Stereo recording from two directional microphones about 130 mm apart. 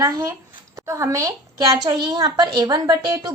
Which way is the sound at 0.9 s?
20° right (ahead or behind).